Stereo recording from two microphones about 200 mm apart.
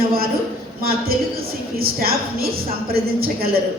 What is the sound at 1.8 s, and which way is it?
Speech, 50° right (ahead or behind).